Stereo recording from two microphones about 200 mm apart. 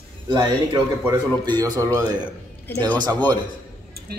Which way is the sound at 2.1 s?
10° left (ahead or behind).